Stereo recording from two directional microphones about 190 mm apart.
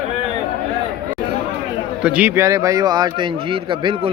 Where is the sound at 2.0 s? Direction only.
5° right (ahead or behind).